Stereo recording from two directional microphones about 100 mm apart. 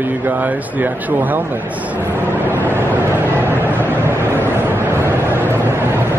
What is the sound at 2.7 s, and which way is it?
Vehicle, 20° right (ahead or behind).